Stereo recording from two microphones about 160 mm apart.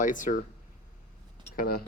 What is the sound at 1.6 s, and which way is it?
Speech, 70° left (ahead or behind).